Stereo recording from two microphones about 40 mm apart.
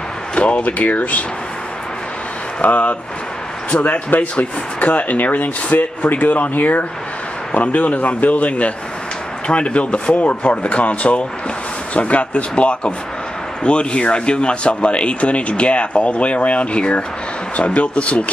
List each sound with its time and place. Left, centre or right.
0.4 s speech: left
2.6 s speech: left